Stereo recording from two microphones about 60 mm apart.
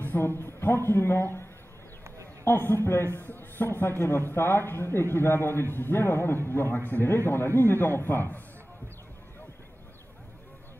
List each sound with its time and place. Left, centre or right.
0.0 s a man's voice: left
2.4 s a man's voice: left